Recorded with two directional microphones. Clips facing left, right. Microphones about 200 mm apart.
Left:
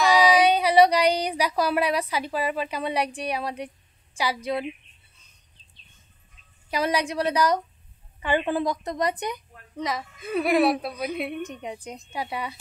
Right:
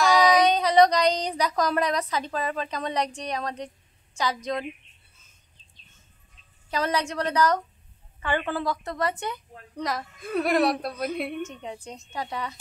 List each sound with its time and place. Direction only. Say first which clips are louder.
0.0 s female singing: left 1 dB; centre (ahead or behind)
0.4 s a woman's voice: left 1 dB; 10° left (ahead or behind)
6.7 s a woman's voice: left 2 dB; 10° left (ahead or behind)
9.8 s a woman's voice: left 1 dB; centre (ahead or behind)
11.4 s a woman's voice: left 2 dB; 15° left (ahead or behind)